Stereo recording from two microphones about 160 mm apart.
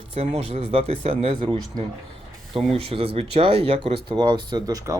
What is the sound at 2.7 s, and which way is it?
Speech, 35° right (ahead or behind).